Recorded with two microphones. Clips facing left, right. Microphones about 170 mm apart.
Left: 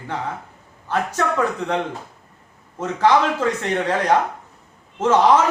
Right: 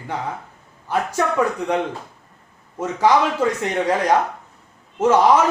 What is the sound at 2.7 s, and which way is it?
Speech, 10° right (ahead or behind).